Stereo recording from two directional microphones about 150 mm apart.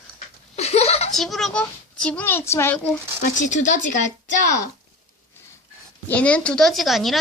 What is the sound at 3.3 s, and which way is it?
Speech, 55° left (ahead or behind).